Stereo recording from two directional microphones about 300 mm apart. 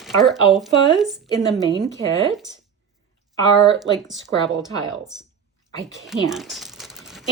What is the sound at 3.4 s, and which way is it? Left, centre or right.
Speech, centre.